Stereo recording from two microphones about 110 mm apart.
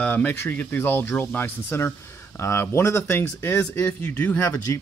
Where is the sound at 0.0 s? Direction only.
15° left (ahead or behind).